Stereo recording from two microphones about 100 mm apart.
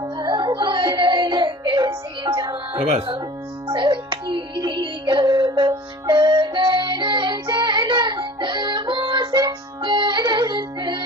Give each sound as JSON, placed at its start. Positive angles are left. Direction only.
{"t": 0.0, "sound": "music", "side_deg": -45}
{"t": 3.7, "sound": "music", "side_deg": -50}